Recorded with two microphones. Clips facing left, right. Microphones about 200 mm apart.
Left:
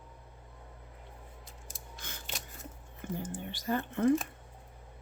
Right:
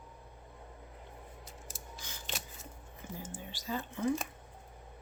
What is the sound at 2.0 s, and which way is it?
Camera, 55° left (ahead or behind).